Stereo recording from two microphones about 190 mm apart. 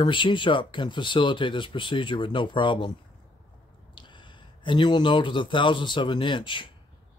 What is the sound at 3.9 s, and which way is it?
Speech, 25° left (ahead or behind).